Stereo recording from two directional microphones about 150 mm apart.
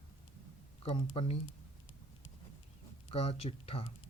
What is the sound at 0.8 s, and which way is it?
Speech, 35° left (ahead or behind).